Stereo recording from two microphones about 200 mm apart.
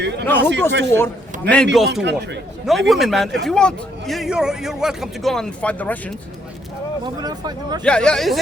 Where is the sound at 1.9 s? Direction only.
60° right (ahead or behind).